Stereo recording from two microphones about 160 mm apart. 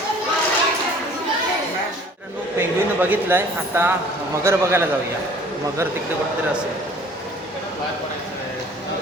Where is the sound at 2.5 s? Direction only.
10° right (ahead or behind).